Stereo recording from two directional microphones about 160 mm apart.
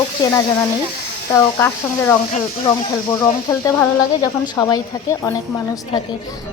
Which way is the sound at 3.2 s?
20° left (ahead or behind).